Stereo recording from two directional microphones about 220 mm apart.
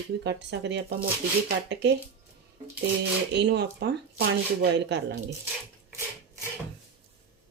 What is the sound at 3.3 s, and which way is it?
Speech, 50° right (ahead or behind).